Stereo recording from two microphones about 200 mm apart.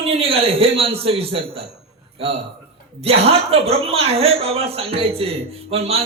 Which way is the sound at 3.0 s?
30° right (ahead or behind).